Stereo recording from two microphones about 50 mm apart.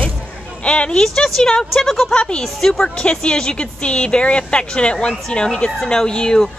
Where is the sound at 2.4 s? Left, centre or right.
Centre.